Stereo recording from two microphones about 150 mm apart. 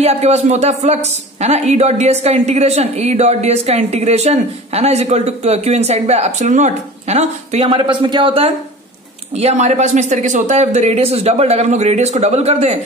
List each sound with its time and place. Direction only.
0.0 s a woman's voice: 45° right (ahead or behind)